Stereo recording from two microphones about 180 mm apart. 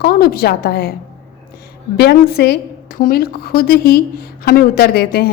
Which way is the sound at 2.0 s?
60° left (ahead or behind).